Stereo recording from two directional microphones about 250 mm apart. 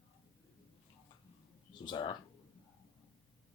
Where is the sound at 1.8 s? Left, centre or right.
Centre.